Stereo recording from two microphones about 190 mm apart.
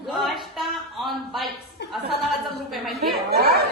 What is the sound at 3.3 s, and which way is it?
Speech, 55° right (ahead or behind).